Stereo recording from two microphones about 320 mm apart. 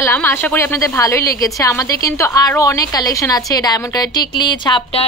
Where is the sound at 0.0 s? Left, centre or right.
Centre.